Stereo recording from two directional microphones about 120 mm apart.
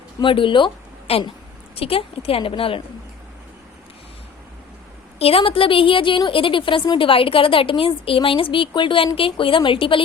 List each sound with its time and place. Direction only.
0.2 s a woman's voice: 45° left (ahead or behind)
5.2 s a woman's voice: 50° left (ahead or behind)